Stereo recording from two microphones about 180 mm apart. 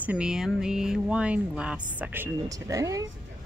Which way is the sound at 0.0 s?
5° right (ahead or behind).